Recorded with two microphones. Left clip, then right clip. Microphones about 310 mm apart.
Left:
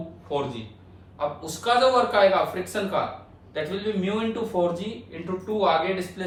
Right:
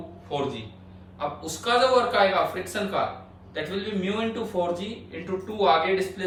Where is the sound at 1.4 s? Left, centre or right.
Centre.